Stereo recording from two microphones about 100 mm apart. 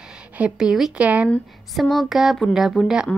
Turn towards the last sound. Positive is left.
turn(degrees=-5)  # may be behind; listen again after turning